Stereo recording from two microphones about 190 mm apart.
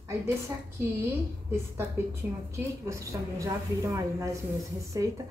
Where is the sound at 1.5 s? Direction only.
15° right (ahead or behind).